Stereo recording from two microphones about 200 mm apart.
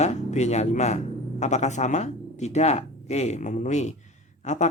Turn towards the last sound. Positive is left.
turn(degrees=35)  # may be behind; listen again after turning